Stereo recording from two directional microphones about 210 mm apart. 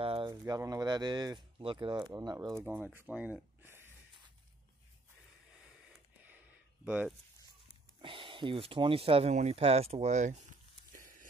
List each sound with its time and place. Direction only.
0.0 s a sound: 25° right (ahead or behind)
0.3 s speech: 15° right (ahead or behind)
6.8 s speech: 5° right (ahead or behind)
8.0 s speech: 25° right (ahead or behind)